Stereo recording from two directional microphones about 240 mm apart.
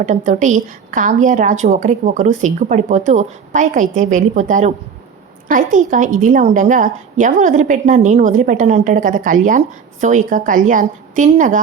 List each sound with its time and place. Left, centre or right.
0.0 s a woman's voice: right